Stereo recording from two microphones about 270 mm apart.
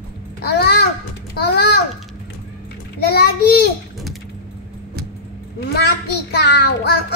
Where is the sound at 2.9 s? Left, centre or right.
Left.